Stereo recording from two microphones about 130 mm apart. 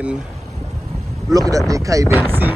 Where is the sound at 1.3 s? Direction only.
30° right (ahead or behind).